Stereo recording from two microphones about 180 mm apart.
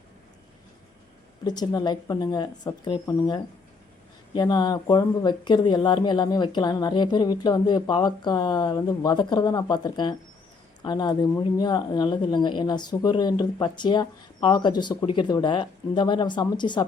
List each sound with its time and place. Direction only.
1.5 s speech: 20° left (ahead or behind)